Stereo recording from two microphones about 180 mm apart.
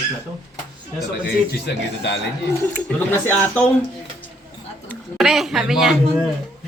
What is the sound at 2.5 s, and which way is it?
Speech, 10° left (ahead or behind).